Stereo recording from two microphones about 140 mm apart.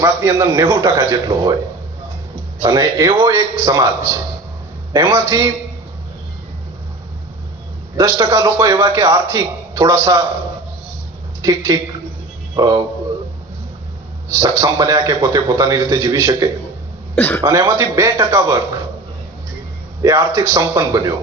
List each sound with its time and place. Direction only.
0.0 s a man's voice: 20° right (ahead or behind)
2.6 s a man's voice: 25° right (ahead or behind)
7.9 s a man's voice: 20° right (ahead or behind)
11.4 s a man's voice: 25° right (ahead or behind)
14.3 s a man's voice: 25° right (ahead or behind)
17.2 s speech: 15° left (ahead or behind)
17.4 s a man's voice: 20° right (ahead or behind)
20.0 s a man's voice: 20° right (ahead or behind)